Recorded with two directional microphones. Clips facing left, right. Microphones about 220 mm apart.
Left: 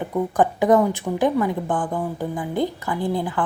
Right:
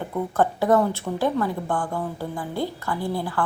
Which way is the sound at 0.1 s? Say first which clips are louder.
Left 2 dB; 15° left (ahead or behind).